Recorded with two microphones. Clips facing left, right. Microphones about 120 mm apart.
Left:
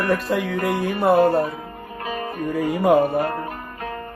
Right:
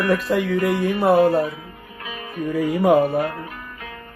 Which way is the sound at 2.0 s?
40° left (ahead or behind).